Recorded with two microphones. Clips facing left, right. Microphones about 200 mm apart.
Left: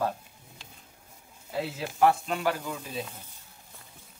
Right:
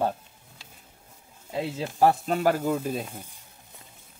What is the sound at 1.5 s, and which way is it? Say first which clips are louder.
Speech: right 3 dB; 25° right (ahead or behind).